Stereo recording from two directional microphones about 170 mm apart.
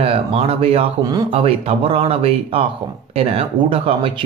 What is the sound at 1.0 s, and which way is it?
Speech, 25° right (ahead or behind).